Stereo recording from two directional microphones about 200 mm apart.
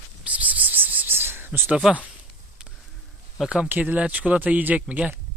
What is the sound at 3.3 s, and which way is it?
Speech, 5° right (ahead or behind).